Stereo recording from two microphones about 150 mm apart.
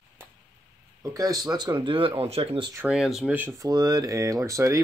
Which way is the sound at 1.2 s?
25° right (ahead or behind).